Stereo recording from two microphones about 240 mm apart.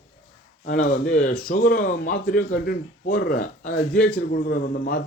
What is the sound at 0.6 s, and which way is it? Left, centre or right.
Speech, left.